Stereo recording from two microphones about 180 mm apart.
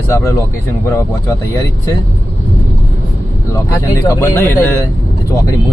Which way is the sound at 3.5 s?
15° left (ahead or behind).